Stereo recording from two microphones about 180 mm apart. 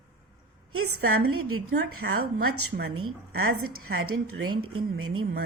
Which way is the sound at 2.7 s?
45° right (ahead or behind).